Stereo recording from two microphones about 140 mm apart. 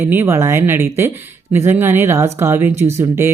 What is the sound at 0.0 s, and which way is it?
A man's voice, 15° right (ahead or behind).